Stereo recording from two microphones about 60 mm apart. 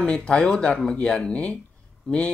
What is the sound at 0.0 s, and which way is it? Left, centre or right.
Speech, centre.